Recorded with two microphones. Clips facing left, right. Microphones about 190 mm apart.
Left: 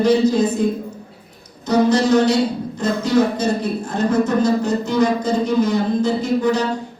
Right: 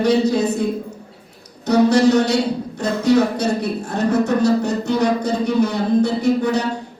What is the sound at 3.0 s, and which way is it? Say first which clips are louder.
Speech: right 2 dB; 70° right (ahead or behind).